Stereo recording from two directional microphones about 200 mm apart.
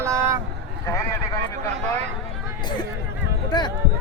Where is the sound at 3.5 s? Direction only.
20° left (ahead or behind).